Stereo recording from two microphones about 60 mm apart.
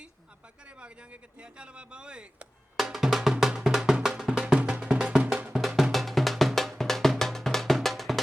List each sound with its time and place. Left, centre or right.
0.8 s a man's voice: centre
2.7 s music: centre
5.5 s music: centre